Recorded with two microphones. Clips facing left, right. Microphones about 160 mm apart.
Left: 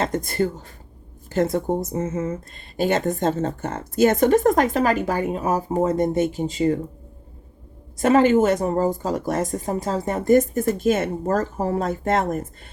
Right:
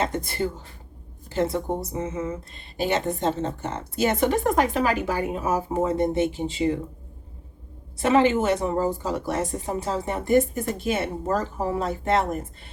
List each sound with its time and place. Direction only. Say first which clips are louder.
0.1 s speech: left 4 dB; 45° left (ahead or behind)
7.9 s speech: left 4 dB; 45° left (ahead or behind)